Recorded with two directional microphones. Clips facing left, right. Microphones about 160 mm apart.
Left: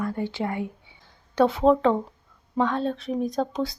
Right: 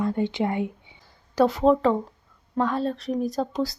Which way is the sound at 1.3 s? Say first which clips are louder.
Even; centre (ahead or behind).